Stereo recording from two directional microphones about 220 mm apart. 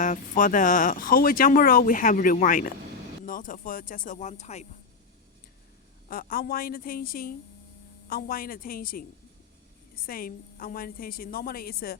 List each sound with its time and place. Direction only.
0.0 s speech: 35° left (ahead or behind)
6.1 s speech: 40° left (ahead or behind)
10.1 s speech: 40° left (ahead or behind)